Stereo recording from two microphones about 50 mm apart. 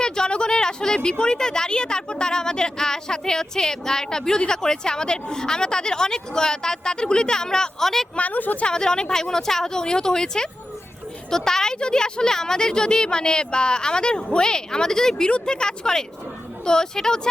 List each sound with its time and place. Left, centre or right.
0.0 s a woman's voice: centre
8.1 s a woman's voice: left
8.6 s a woman's voice: centre